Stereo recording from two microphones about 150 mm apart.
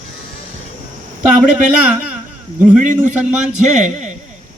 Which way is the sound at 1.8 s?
10° right (ahead or behind).